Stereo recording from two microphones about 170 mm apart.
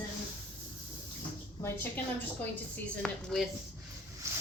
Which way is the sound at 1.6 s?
15° left (ahead or behind).